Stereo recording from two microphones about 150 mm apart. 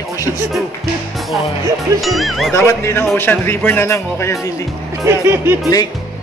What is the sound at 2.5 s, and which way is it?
Speech, 20° left (ahead or behind).